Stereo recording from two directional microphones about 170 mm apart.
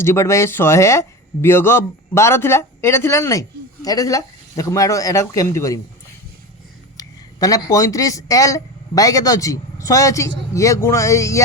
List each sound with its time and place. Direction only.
0.0 s speech: 15° left (ahead or behind)
6.9 s speech: 20° left (ahead or behind)